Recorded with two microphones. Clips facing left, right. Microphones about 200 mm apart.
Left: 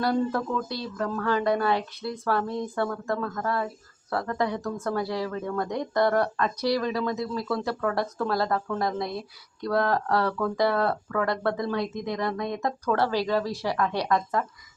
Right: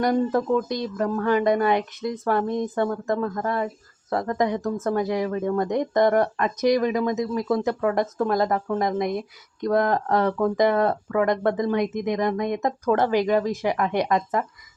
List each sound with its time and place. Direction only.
0.0 s speech: 15° right (ahead or behind)